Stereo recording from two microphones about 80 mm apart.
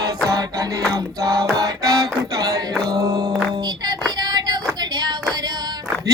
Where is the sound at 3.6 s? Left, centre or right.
Right.